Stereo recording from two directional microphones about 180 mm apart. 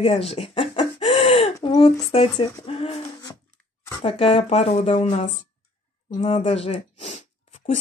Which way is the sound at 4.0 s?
35° left (ahead or behind).